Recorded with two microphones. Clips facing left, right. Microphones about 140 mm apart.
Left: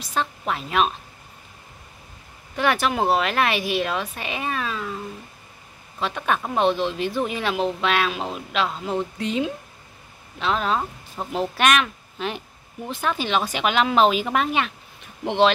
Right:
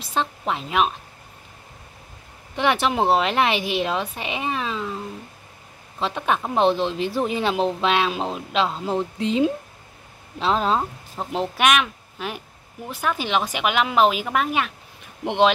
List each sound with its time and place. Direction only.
0.0 s speech: 25° right (ahead or behind)
2.5 s speech: 20° right (ahead or behind)
5.9 s speech: 25° right (ahead or behind)
10.8 s speech: 15° right (ahead or behind)